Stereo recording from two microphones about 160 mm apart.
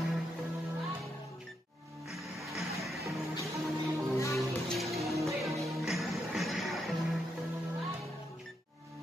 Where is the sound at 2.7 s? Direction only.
Centre (ahead or behind).